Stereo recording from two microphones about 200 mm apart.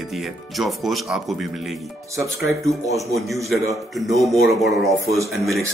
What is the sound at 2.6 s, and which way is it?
Speech, 15° right (ahead or behind).